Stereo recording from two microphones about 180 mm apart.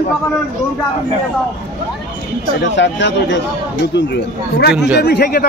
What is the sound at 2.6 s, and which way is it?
Speech, 85° left.